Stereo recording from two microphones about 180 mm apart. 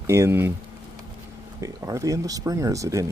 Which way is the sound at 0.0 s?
15° right (ahead or behind).